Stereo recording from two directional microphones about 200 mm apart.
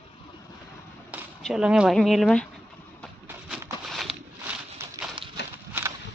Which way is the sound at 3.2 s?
10° right (ahead or behind).